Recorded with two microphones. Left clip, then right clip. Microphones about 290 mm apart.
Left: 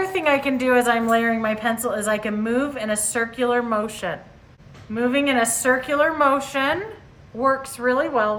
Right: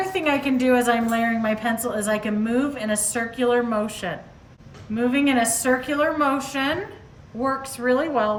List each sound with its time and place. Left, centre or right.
0.0 s a woman's voice: centre
7.8 s a woman's voice: centre